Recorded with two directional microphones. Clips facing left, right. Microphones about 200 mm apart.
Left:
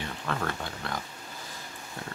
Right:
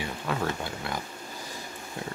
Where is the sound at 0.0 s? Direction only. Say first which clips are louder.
Right 2 dB; 10° right (ahead or behind).